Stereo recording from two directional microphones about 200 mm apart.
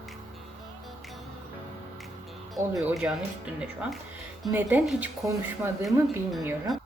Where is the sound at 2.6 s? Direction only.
15° right (ahead or behind).